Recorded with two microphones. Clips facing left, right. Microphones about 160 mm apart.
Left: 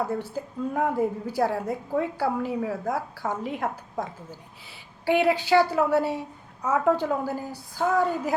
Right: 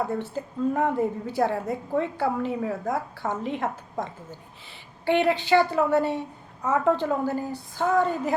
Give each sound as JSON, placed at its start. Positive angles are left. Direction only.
{"t": 0.3, "sound": "a woman's voice", "side_deg": 5}